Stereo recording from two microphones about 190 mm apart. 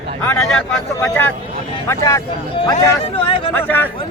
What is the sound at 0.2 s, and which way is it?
Speech, 10° left (ahead or behind).